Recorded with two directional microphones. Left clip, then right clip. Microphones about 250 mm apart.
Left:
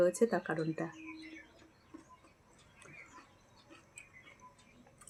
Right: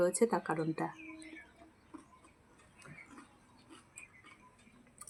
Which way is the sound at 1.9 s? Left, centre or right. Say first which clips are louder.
Right 2 dB; centre.